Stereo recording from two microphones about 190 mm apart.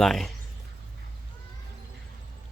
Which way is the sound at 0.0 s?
Centre (ahead or behind).